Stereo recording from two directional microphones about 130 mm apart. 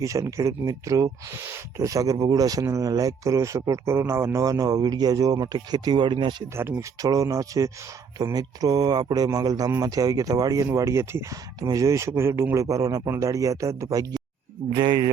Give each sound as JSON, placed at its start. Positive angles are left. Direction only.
{"t": 0.0, "sound": "speech", "side_deg": -25}
{"t": 6.6, "sound": "speech", "side_deg": -20}
{"t": 14.8, "sound": "speech", "side_deg": -35}